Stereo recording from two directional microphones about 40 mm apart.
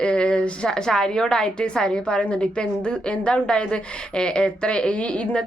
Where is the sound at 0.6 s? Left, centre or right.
Centre; by 5.4 s left.